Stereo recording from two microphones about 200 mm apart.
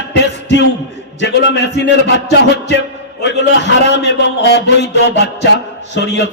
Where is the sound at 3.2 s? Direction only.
60° left (ahead or behind).